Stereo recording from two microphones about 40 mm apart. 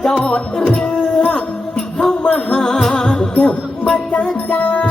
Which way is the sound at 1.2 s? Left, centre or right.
Centre.